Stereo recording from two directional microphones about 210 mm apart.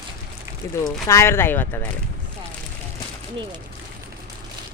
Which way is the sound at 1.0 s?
15° left (ahead or behind).